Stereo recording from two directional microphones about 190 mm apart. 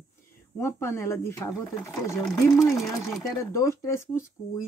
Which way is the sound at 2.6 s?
Centre (ahead or behind).